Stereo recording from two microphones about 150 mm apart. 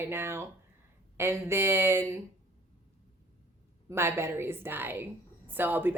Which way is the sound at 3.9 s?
15° right (ahead or behind).